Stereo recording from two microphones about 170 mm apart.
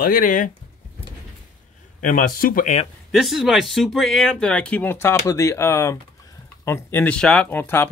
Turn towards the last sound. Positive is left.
turn(degrees=10)  # may be behind; listen again after turning